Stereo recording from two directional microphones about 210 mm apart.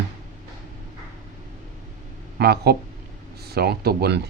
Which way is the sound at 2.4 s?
50° right (ahead or behind).